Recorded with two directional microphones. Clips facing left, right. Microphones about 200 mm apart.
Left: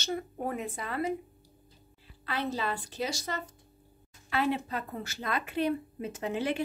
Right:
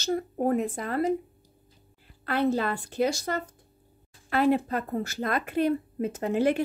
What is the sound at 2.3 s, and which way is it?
Speech, 55° right (ahead or behind).